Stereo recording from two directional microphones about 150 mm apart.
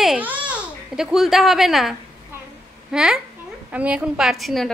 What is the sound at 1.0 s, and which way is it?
Speech, 5° right (ahead or behind).